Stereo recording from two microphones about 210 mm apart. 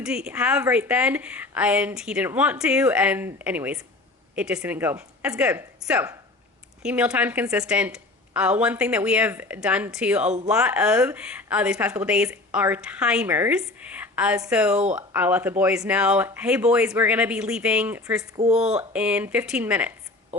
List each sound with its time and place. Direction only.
0.0 s a woman's voice: 5° right (ahead or behind)
18.3 s speech: 30° right (ahead or behind)
18.8 s a woman's voice: 5° right (ahead or behind)